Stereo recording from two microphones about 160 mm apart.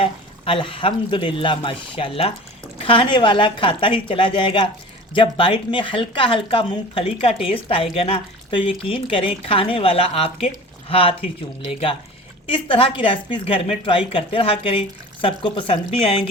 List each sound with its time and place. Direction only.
0.0 s speech: 35° left (ahead or behind)
12.5 s speech: 35° left (ahead or behind)